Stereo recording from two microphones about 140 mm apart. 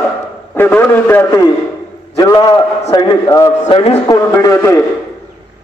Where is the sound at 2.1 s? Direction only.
25° left (ahead or behind).